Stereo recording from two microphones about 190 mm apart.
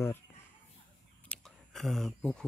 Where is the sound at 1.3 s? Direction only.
Centre (ahead or behind).